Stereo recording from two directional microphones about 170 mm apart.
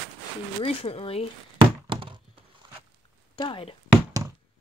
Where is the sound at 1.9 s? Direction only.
30° right (ahead or behind).